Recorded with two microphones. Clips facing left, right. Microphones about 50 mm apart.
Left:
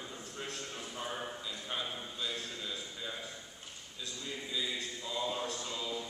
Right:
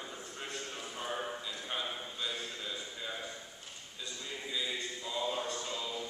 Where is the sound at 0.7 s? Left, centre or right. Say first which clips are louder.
Right 1 dB; centre.